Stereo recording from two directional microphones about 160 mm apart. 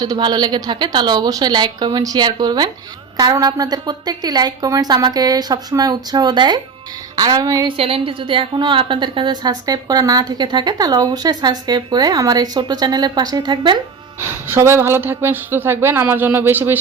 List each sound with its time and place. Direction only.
0.0 s a woman's voice: 25° right (ahead or behind)
7.8 s a woman's voice: 35° right (ahead or behind)
14.2 s speech: 15° right (ahead or behind)